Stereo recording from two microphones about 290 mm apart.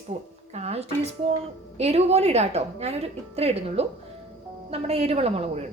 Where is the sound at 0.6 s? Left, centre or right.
Right.